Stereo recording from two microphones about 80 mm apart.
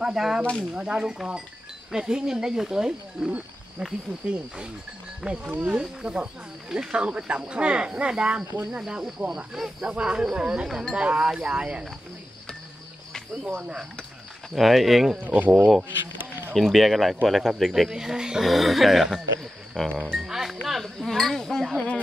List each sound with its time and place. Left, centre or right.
0.0 s speech: centre
0.4 s speech: centre
0.7 s speech: centre
5.2 s speech: centre
13.6 s speech: centre
14.5 s speech: centre
15.2 s speech: right
16.2 s a sound: right
16.5 s speech: centre
19.8 s speech: centre
20.1 s speech: centre